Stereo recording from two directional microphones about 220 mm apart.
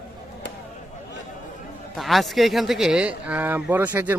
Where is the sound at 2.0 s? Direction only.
Centre (ahead or behind).